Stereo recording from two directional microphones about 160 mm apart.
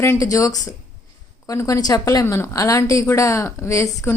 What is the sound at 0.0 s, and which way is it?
A woman's voice, 20° left (ahead or behind).